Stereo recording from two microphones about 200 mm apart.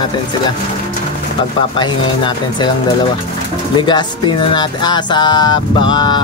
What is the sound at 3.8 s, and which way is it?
Speech, 20° left (ahead or behind).